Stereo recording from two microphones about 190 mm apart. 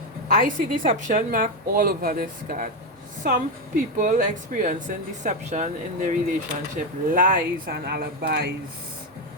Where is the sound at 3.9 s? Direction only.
45° right (ahead or behind).